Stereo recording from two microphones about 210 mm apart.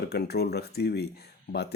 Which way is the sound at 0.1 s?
50° left (ahead or behind).